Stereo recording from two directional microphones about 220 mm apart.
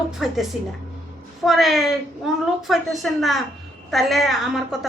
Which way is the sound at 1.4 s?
Centre (ahead or behind).